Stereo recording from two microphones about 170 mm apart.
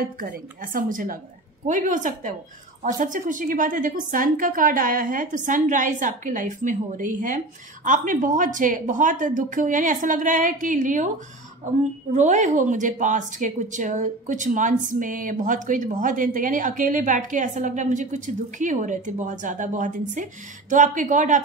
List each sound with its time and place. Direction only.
0.0 s a woman's voice: 55° right (ahead or behind)